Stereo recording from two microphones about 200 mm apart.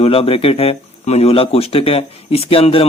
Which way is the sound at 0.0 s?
30° left (ahead or behind).